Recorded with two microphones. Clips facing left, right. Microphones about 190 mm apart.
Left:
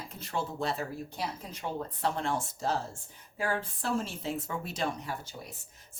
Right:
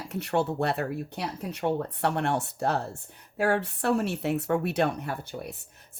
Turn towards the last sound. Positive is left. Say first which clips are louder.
# right 5 dB
turn(degrees=-60)  # may be behind; listen again after turning